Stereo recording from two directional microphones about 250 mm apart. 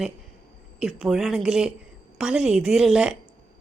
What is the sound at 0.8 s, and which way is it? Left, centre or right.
A woman's voice, centre.